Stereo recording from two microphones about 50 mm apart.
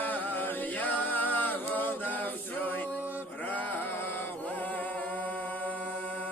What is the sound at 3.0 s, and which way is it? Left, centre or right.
Male singing, right.